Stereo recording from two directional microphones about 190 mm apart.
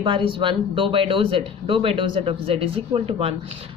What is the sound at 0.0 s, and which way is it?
A woman's voice, 25° right (ahead or behind).